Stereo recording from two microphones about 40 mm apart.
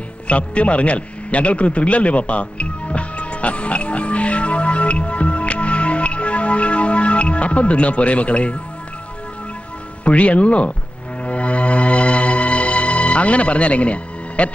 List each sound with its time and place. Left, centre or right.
0.3 s a sound: left
10.0 s speech: left
11.2 s music: left